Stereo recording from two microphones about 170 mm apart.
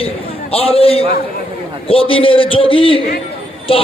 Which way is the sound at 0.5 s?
35° left (ahead or behind).